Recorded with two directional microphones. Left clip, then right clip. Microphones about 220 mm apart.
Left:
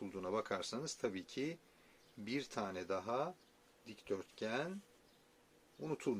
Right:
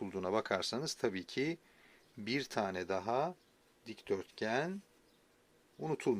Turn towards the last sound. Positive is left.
turn(degrees=-45)  # may be behind; listen again after turning